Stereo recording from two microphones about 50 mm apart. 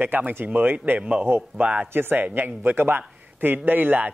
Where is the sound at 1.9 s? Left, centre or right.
Right.